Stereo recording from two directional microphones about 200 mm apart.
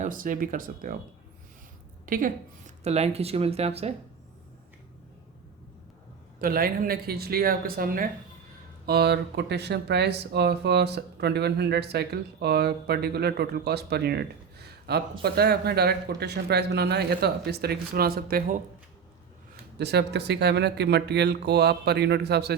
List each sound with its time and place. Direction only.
0.0 s speech: 40° right (ahead or behind)
2.0 s a woman's voice: 45° right (ahead or behind)
6.4 s speech: 45° right (ahead or behind)
8.9 s speech: 55° right (ahead or behind)
19.8 s speech: 55° right (ahead or behind)